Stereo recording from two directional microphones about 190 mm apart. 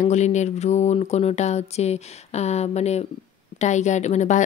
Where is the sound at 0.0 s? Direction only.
35° left (ahead or behind).